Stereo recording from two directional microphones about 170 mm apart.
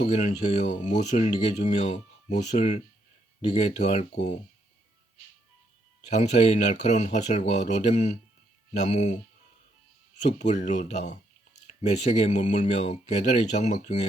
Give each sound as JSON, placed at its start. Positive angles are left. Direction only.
{"t": 0.0, "sound": "speech", "side_deg": 45}
{"t": 6.1, "sound": "speech", "side_deg": 45}
{"t": 10.3, "sound": "speech", "side_deg": 45}